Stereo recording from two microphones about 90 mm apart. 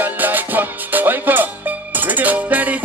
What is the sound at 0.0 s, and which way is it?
Music, 20° right (ahead or behind).